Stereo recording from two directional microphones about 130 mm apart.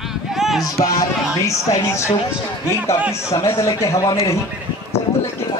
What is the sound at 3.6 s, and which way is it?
Speech, 25° left (ahead or behind).